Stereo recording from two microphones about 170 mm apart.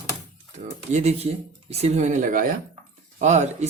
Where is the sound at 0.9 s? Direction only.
40° right (ahead or behind).